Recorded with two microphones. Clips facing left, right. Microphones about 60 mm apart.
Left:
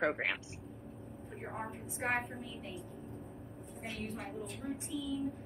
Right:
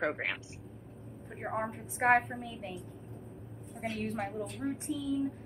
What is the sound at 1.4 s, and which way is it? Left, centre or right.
Speech, right.